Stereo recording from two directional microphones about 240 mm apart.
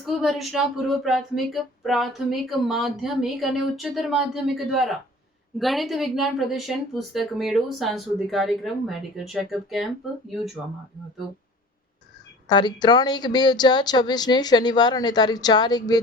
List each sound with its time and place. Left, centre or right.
0.0 s a woman's voice: centre
12.5 s speech: centre